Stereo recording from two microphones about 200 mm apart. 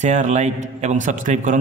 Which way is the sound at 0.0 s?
35° right (ahead or behind).